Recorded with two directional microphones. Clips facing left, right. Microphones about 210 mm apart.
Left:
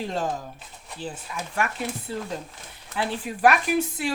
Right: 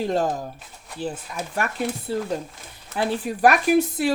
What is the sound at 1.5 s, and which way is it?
Speech, 40° right (ahead or behind).